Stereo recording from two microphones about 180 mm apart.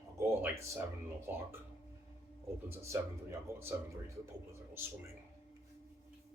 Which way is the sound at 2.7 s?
15° right (ahead or behind).